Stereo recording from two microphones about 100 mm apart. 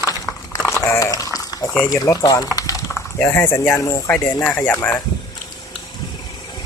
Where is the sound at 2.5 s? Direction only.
35° left (ahead or behind).